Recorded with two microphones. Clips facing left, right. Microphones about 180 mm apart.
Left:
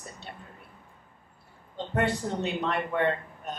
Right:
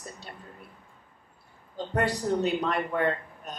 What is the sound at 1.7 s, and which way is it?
A woman's voice, 40° right (ahead or behind).